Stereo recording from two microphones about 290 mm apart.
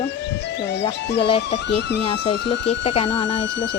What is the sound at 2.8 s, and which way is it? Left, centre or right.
Speech, centre.